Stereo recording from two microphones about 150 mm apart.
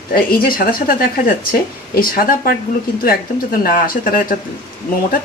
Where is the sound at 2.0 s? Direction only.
75° left (ahead or behind).